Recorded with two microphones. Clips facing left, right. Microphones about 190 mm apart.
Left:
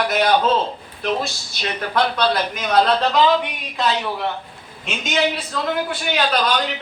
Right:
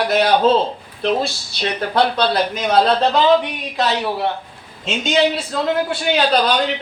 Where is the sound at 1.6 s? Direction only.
30° right (ahead or behind).